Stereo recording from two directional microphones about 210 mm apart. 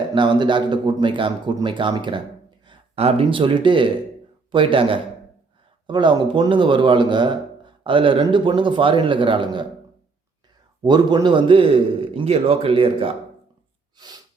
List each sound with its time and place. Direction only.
0.1 s speech: 20° right (ahead or behind)
10.8 s speech: 20° right (ahead or behind)